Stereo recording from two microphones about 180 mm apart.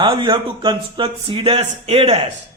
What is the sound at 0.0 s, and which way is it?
Speech, 30° right (ahead or behind).